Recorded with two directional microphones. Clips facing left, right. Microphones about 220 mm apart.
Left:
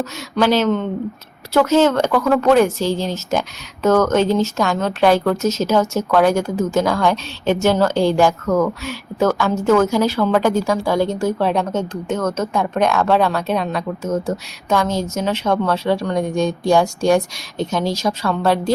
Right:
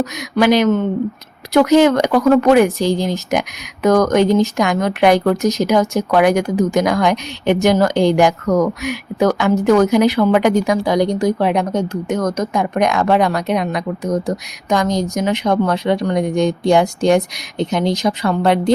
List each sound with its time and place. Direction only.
0.0 s a woman's voice: 15° right (ahead or behind)